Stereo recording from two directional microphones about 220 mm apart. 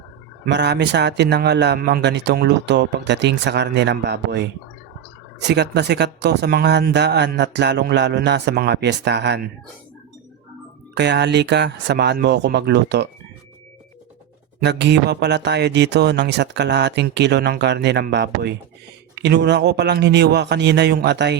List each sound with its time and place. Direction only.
0.4 s speech: 50° right (ahead or behind)
10.9 s speech: 50° right (ahead or behind)
14.6 s speech: 50° right (ahead or behind)